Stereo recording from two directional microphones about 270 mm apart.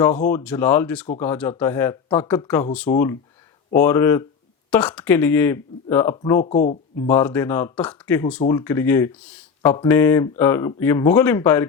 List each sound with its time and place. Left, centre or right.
0.3 s speech: centre
6.4 s speech: left
7.1 s speech: centre